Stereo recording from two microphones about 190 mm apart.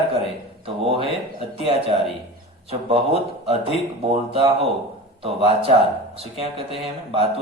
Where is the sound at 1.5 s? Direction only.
30° right (ahead or behind).